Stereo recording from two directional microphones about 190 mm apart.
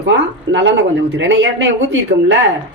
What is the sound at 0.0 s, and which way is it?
Speech, 70° right (ahead or behind).